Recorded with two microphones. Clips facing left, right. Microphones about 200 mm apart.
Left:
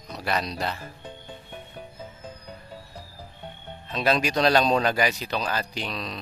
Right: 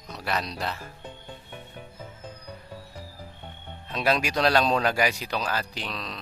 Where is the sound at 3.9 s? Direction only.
5° right (ahead or behind).